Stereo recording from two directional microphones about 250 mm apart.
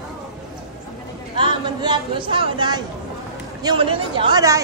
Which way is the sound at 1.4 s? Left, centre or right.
Centre.